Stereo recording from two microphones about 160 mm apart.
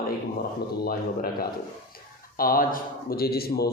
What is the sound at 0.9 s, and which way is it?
A man's voice, 65° left (ahead or behind).